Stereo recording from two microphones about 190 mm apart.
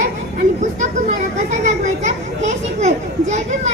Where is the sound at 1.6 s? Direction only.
40° right (ahead or behind).